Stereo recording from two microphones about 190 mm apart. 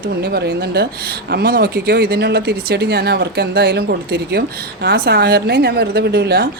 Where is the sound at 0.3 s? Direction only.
60° right (ahead or behind).